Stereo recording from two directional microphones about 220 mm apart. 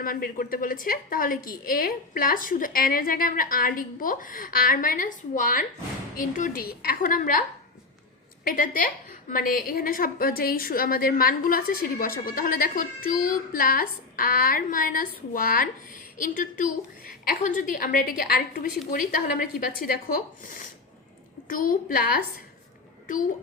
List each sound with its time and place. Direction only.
0.0 s a woman's voice: 40° left (ahead or behind)
8.4 s a woman's voice: 40° left (ahead or behind)